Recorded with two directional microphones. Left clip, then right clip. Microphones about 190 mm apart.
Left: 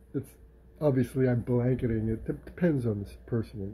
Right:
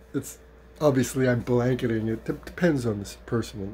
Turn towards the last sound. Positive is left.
turn(degrees=-15)  # may be behind; listen again after turning